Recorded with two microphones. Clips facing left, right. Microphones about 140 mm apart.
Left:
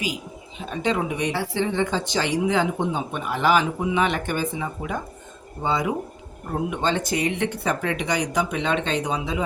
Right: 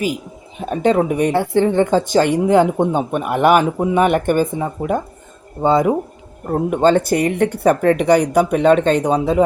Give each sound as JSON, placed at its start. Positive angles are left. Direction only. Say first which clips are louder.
{"t": 0.6, "sound": "speech", "louder": "right 9 dB", "side_deg": -50}